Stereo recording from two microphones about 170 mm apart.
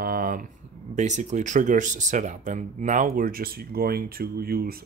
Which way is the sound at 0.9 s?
45° right (ahead or behind).